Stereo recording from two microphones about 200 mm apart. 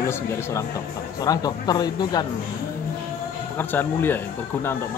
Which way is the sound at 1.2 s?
20° left (ahead or behind).